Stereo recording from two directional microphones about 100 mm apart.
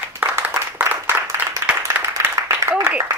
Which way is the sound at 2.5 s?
30° right (ahead or behind).